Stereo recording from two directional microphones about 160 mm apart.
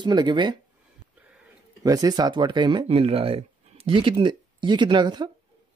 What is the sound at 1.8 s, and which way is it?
Speech, 25° right (ahead or behind).